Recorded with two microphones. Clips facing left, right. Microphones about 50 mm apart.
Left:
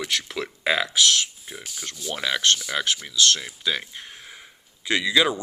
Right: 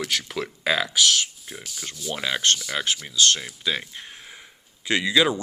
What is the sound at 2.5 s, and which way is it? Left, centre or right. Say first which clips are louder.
Speech: left 1 dB; centre.